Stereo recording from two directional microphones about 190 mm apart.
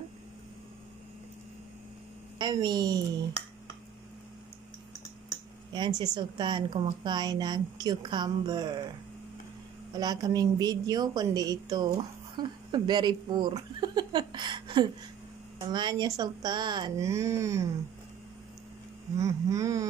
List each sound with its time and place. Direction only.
2.3 s speech: 20° right (ahead or behind)
5.7 s speech: 20° right (ahead or behind)
9.9 s a woman's voice: 20° right (ahead or behind)
19.1 s a sound: 15° right (ahead or behind)